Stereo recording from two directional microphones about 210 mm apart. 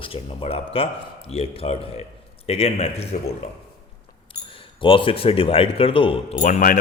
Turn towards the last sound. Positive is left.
turn(degrees=40)  # may be behind; listen again after turning